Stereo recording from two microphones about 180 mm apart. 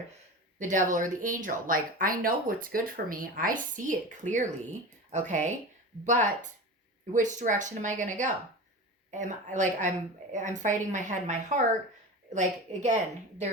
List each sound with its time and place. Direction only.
0.6 s speech: 45° right (ahead or behind)